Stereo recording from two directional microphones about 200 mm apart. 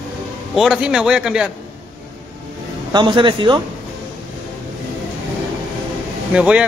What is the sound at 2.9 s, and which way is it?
Speech, 25° right (ahead or behind).